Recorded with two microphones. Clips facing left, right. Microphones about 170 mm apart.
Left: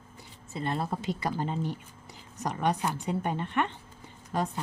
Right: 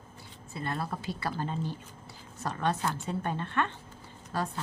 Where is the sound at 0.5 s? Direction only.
20° left (ahead or behind).